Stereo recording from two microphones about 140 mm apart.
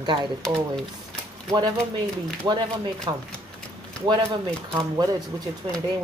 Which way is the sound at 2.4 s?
30° right (ahead or behind).